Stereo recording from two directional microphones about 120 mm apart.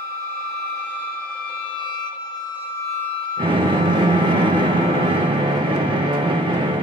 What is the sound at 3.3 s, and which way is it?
Music, 40° right (ahead or behind).